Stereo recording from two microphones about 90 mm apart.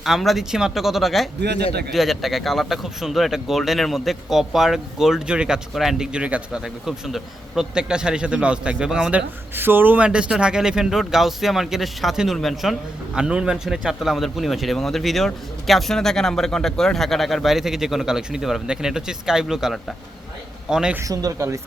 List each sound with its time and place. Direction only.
0.0 s a man's voice: centre (ahead or behind)
9.6 s a man's voice: 25° right (ahead or behind); by 20.9 s 10° right (ahead or behind)
21.0 s speech: 40° right (ahead or behind)